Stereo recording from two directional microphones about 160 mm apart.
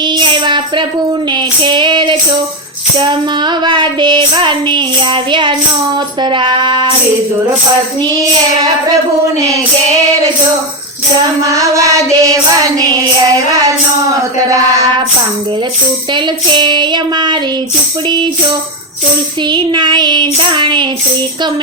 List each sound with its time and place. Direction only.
0.0 s child singing: 30° right (ahead or behind)
11.4 s child singing: 20° right (ahead or behind)
16.1 s child singing: 30° right (ahead or behind)